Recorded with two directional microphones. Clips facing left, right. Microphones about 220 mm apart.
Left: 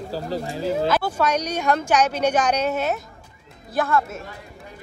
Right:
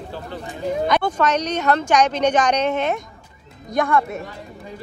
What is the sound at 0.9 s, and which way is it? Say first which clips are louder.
A woman's voice: right 2 dB; 5° left (ahead or behind).